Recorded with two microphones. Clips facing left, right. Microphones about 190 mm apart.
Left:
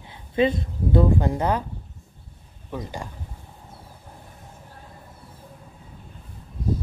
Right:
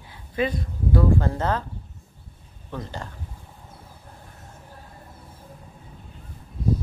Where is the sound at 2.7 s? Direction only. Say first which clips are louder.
Left 2 dB; 15° left (ahead or behind).